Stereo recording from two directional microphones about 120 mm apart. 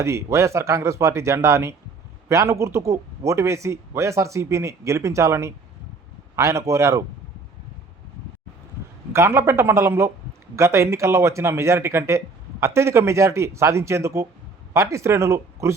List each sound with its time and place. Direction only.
0.0 s speech: 25° right (ahead or behind)
9.1 s speech: 25° right (ahead or behind)